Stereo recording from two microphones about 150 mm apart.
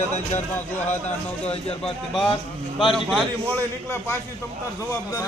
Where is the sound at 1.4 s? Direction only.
40° left (ahead or behind).